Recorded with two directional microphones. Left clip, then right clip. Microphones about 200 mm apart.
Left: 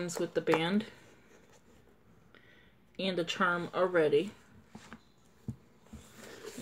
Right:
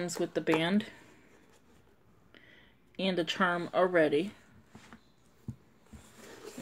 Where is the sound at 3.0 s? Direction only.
45° right (ahead or behind).